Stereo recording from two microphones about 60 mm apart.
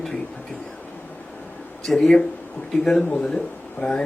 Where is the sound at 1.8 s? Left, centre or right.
Centre.